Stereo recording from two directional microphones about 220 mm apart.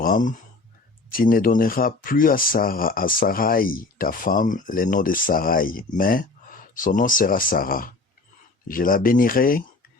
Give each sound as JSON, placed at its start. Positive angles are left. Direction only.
{"t": 0.0, "sound": "speech", "side_deg": 35}